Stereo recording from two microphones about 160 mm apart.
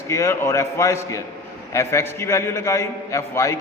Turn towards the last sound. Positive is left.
turn(degrees=20)  # may be behind; listen again after turning